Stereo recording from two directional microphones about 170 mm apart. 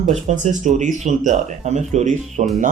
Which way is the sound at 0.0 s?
45° right (ahead or behind).